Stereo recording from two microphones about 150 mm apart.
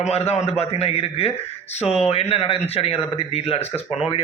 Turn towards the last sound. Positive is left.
turn(degrees=40)  # may be behind; listen again after turning